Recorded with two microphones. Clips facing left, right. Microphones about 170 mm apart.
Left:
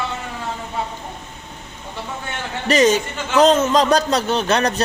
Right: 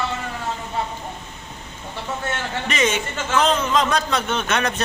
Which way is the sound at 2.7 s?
40° left (ahead or behind).